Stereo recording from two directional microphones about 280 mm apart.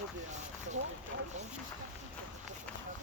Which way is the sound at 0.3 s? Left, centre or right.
Right.